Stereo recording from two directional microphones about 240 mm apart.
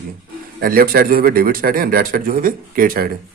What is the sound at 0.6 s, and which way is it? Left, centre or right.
Speech, right.